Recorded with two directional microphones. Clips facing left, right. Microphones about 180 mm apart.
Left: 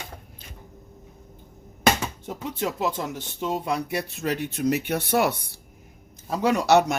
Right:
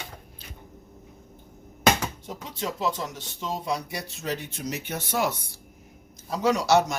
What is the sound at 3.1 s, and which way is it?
Speech, 60° left (ahead or behind).